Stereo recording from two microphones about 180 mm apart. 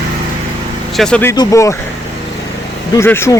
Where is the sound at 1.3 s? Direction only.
20° left (ahead or behind).